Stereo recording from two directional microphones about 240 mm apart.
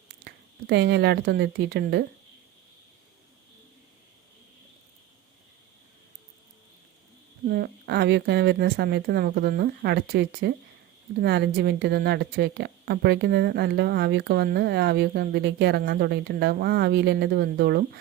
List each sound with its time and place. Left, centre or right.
0.3 s speech: right
7.4 s speech: right